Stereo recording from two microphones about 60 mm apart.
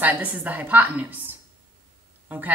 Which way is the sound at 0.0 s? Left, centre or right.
Right.